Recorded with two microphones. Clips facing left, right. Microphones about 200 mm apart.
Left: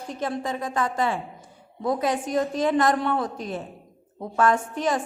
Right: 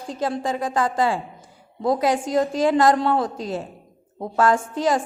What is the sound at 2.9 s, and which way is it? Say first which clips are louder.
Speech: right 4 dB; 35° right (ahead or behind).